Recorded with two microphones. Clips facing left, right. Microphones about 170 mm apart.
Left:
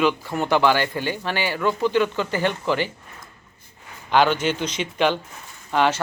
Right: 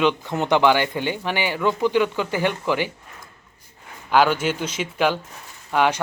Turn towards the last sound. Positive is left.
turn(degrees=-10)  # may be behind; listen again after turning